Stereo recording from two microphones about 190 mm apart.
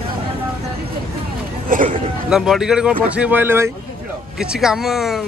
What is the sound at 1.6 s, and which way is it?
Hubbub, 45° right (ahead or behind).